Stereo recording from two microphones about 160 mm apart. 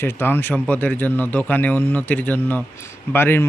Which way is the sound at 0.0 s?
15° left (ahead or behind).